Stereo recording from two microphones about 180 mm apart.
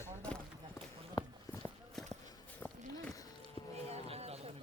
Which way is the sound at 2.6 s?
10° left (ahead or behind).